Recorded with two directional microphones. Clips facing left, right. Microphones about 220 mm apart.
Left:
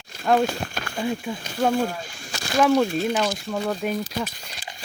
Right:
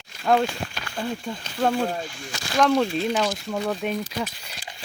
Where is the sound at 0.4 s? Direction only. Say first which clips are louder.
Left 3 dB; 45° left (ahead or behind).